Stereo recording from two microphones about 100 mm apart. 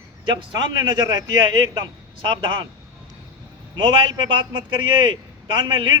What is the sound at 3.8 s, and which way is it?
A man's voice, 55° right (ahead or behind).